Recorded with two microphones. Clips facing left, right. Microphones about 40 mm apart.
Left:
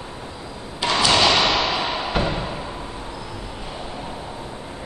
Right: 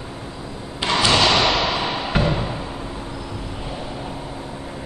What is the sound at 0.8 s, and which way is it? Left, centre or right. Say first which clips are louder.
Thump: even; right.